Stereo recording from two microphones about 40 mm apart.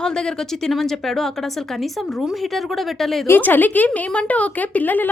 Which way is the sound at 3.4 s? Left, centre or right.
Left.